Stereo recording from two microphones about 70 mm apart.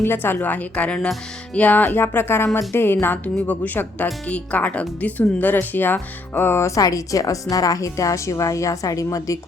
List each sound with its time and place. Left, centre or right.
0.0 s a woman's voice: left